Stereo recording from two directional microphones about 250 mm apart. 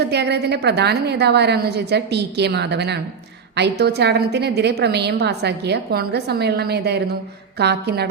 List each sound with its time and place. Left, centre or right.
0.0 s a woman's voice: right